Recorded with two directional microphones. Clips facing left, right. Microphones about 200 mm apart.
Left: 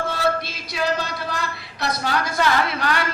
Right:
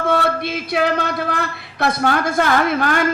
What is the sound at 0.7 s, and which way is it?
A woman's voice, 55° right (ahead or behind).